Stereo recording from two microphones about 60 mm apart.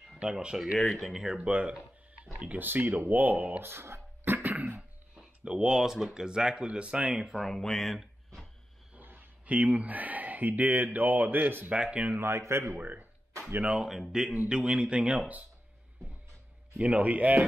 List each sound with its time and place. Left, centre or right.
0.2 s speech: centre
0.7 s speech: centre
1.4 s speech: centre
3.6 s speech: right; by 7.3 s centre
7.3 s speech: centre
9.5 s speech: right
12.2 s a man's voice: right
12.7 s speech: right
16.7 s speech: right